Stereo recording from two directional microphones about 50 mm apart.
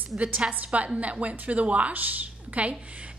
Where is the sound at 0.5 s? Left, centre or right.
Right.